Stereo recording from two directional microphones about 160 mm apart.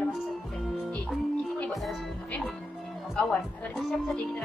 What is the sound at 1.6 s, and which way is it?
Music, centre (ahead or behind).